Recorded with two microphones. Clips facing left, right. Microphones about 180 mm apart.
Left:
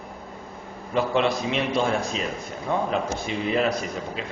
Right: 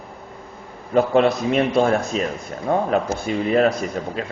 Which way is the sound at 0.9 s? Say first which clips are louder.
Right 6 dB; 45° right (ahead or behind).